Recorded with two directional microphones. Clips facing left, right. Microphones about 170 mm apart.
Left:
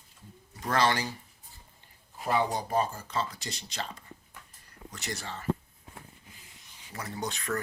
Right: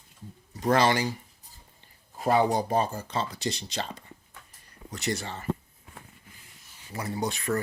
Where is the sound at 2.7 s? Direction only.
25° right (ahead or behind).